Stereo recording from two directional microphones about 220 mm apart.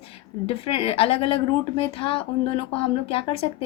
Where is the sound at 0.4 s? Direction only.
25° left (ahead or behind).